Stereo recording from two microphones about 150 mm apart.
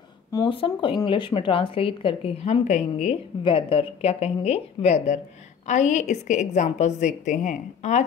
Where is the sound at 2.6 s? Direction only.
55° left (ahead or behind).